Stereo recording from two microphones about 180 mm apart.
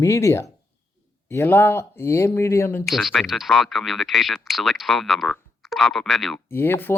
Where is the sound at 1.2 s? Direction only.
15° left (ahead or behind).